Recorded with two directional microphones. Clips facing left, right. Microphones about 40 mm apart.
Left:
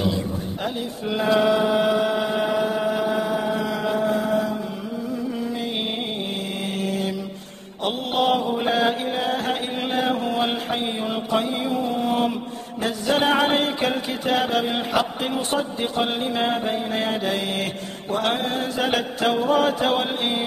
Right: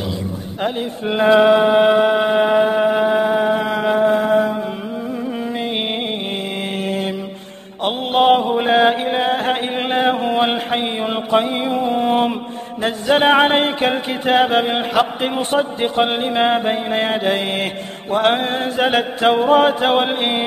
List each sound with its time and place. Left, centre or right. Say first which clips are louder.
0.7 s mantra: right 7 dB; right
6.8 s mantra: right 3 dB; right